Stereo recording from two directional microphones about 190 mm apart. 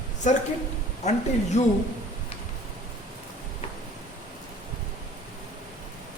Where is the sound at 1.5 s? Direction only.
35° left (ahead or behind).